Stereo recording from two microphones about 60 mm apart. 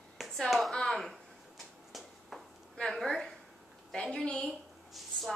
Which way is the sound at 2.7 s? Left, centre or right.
Centre.